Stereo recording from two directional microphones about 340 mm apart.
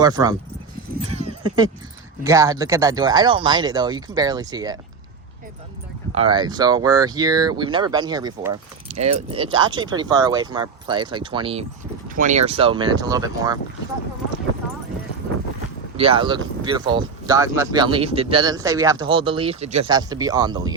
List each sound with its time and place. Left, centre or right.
0.0 s speech: centre
1.0 s a sound: centre
2.2 s speech: centre
6.1 s speech: centre
16.0 s speech: centre